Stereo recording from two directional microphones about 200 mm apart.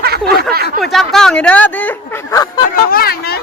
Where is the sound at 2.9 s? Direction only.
50° left (ahead or behind).